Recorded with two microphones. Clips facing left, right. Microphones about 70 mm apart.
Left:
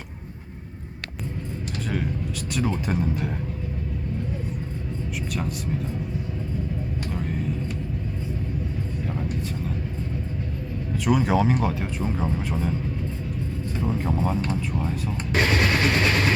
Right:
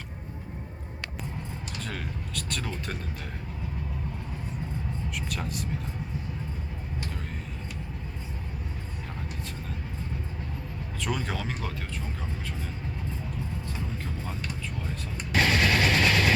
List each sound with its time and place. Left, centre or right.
1.9 s vehicle: centre
5.3 s speech: centre
11.0 s speech: centre
13.8 s speech: left
15.3 s music: left